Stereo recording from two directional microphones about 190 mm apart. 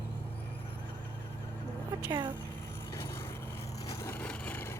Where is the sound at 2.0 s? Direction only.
20° right (ahead or behind).